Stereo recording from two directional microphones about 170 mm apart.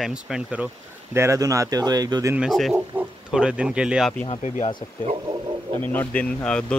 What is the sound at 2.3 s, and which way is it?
Speech, centre (ahead or behind).